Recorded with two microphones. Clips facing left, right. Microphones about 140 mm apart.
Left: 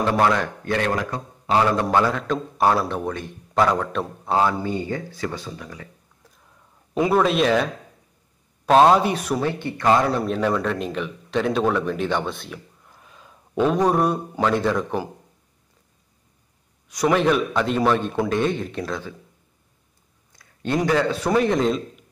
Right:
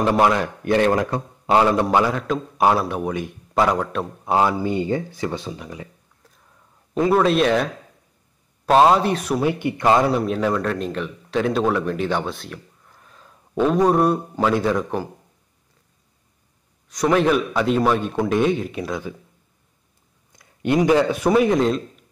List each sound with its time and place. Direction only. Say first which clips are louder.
0.2 s a man's voice: right 2 dB; 15° right (ahead or behind)
1.9 s a man's voice: right 1 dB; 10° right (ahead or behind)
6.9 s a man's voice: right 2 dB; 15° left (ahead or behind)
7.2 s a man's voice: right 1 dB; centre (ahead or behind)
9.4 s a man's voice: right 3 dB; 15° right (ahead or behind)
10.2 s a man's voice: right 1 dB; centre (ahead or behind)
13.0 s a sound: left 1 dB; 5° left (ahead or behind)
14.4 s a man's voice: right 1 dB; 5° right (ahead or behind)
16.9 s a man's voice: right 1 dB; centre (ahead or behind)
20.3 s a man's voice: right 4 dB; 15° right (ahead or behind)